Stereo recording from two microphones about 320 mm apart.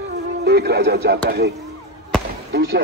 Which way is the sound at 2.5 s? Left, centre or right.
Right.